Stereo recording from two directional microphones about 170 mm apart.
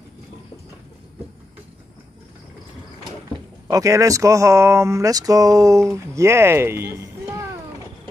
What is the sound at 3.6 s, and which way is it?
Speech, 20° right (ahead or behind).